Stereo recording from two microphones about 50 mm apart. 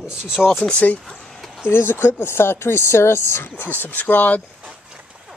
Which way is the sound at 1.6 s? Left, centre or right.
Left.